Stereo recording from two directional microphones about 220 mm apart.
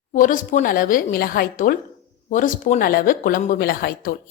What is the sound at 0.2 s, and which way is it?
A woman's voice, 35° left (ahead or behind).